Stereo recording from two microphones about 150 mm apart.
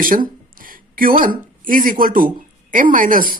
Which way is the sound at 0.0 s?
65° right (ahead or behind).